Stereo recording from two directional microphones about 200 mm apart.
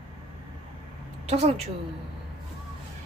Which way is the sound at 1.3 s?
30° right (ahead or behind).